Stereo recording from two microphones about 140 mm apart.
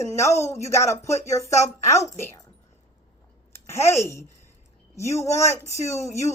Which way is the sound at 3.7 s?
20° left (ahead or behind).